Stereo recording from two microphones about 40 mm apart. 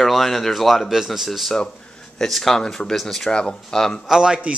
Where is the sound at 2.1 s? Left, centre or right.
Centre.